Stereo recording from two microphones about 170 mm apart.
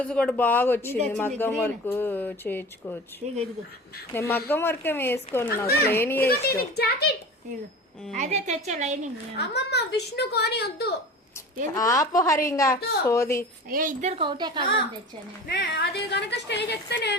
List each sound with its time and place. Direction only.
0.0 s speech: 5° left (ahead or behind)
4.1 s speech: 15° left (ahead or behind)
5.6 s speech: 65° left (ahead or behind)
5.9 s speech: 10° left (ahead or behind)
6.2 s a woman's voice: 65° left (ahead or behind)
8.1 s a woman's voice: 45° right (ahead or behind)
9.4 s a woman's voice: 75° left (ahead or behind)
11.7 s a woman's voice: 20° left (ahead or behind)
12.7 s speech: 65° left (ahead or behind)
13.1 s speech: 15° left (ahead or behind)
13.7 s a woman's voice: 55° right (ahead or behind)
14.2 s a woman's voice: 25° right (ahead or behind)
15.4 s a woman's voice: 75° left (ahead or behind)